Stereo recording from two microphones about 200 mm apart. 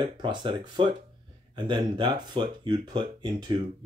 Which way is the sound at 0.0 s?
25° right (ahead or behind).